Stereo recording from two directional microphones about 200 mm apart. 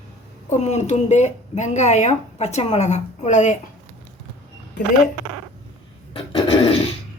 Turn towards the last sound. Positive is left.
turn(degrees=30)  # may be behind; listen again after turning